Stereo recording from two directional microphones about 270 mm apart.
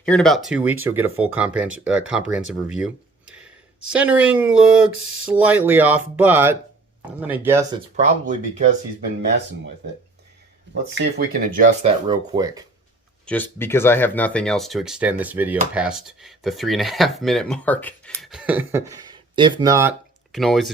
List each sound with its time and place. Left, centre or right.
0.0 s speech: centre
2.5 s a sound: centre
3.9 s speech: centre
7.9 s speech: right
10.8 s speech: right
12.0 s speech: centre
13.2 s speech: centre